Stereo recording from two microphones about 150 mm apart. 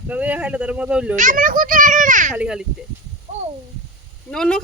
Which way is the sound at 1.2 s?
60° right (ahead or behind).